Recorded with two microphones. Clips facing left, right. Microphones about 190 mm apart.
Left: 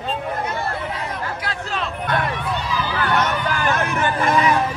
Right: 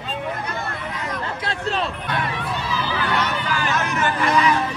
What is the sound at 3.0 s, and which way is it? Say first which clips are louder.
Vehicle: left 5 dB; 50° left (ahead or behind).